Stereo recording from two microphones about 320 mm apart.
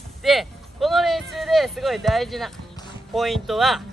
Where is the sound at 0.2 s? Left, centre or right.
Centre.